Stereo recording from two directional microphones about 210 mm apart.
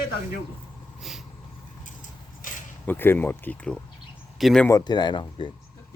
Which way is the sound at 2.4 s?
40° left (ahead or behind).